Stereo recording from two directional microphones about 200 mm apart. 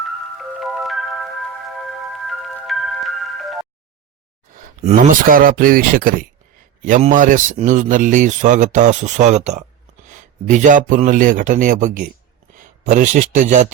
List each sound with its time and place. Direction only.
0.0 s music: centre (ahead or behind)
4.8 s a man's voice: 35° right (ahead or behind)